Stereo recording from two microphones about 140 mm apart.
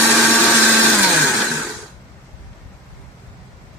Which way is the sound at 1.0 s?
Centre (ahead or behind).